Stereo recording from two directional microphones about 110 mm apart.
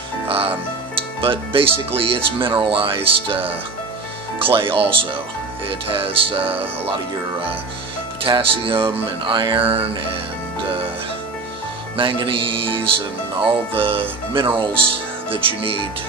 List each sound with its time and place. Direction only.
0.3 s music: 60° right (ahead or behind)
0.9 s speech: 55° right (ahead or behind)
4.5 s speech: 55° right (ahead or behind)
8.2 s music: 55° right (ahead or behind)
11.9 s music: 50° right (ahead or behind)
15.3 s speech: 55° right (ahead or behind)